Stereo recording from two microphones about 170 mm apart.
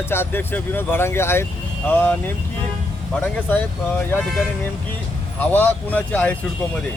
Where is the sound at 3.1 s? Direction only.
10° left (ahead or behind).